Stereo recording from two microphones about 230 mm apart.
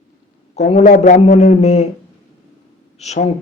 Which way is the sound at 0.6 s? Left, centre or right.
Left.